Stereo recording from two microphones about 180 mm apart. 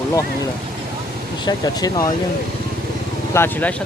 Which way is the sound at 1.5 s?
20° left (ahead or behind).